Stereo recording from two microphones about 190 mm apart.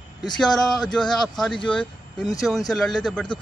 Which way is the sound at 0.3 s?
5° left (ahead or behind).